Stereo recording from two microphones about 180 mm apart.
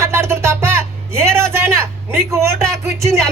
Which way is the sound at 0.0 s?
15° right (ahead or behind).